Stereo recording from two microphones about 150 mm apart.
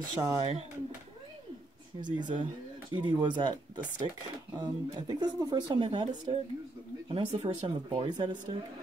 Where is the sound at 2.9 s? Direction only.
30° right (ahead or behind).